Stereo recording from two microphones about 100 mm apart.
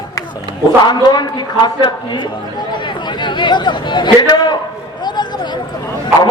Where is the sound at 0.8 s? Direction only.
45° left (ahead or behind).